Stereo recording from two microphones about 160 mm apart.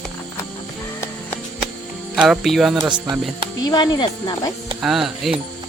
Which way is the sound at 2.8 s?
30° right (ahead or behind).